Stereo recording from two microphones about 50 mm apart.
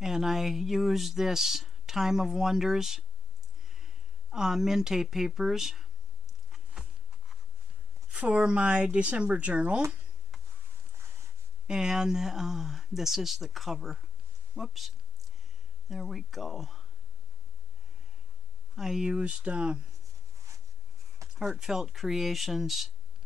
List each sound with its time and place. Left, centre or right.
0.0 s speech: centre
6.5 s a sound: centre
8.1 s a sound: right
8.5 s speech: centre
11.6 s speech: centre
15.9 s speech: centre
18.8 s speech: centre
19.1 s speech: right
21.2 s a sound: right
21.5 s speech: centre